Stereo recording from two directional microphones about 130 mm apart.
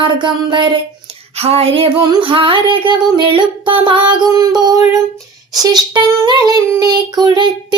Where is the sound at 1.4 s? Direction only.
50° right (ahead or behind).